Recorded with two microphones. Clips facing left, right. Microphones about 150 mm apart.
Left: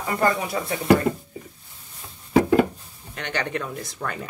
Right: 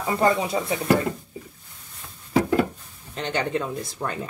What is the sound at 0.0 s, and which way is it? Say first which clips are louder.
Speech: right 2 dB; 25° right (ahead or behind).